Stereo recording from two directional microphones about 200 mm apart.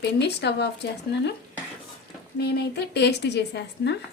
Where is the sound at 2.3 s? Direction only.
55° left (ahead or behind).